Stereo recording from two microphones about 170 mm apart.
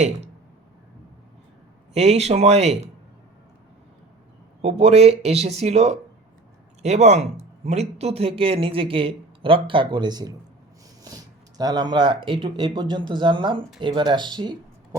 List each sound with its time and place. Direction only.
1.9 s speech: 40° right (ahead or behind)
4.6 s speech: 40° right (ahead or behind)